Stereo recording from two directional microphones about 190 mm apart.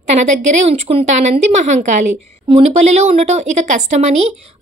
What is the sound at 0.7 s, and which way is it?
A woman's voice, 30° right (ahead or behind).